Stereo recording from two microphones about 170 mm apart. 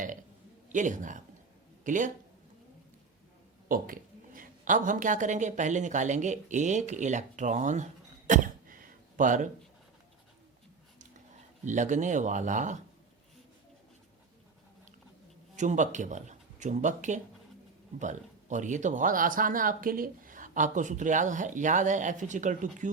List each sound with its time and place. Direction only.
0.7 s speech: 50° right (ahead or behind)
3.7 s speech: 55° right (ahead or behind)
8.3 s a sound: 55° right (ahead or behind)
11.6 s speech: 45° right (ahead or behind)
15.5 s speech: 45° right (ahead or behind)